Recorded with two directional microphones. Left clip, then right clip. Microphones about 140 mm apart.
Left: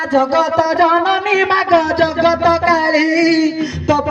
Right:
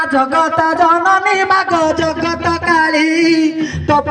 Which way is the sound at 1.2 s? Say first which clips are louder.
Right 2 dB; 50° left (ahead or behind).